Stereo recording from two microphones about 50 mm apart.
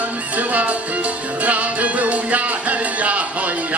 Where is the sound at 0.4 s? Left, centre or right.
Right.